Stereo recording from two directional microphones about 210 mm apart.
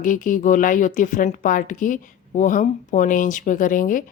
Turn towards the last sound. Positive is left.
turn(degrees=40)  # may be behind; listen again after turning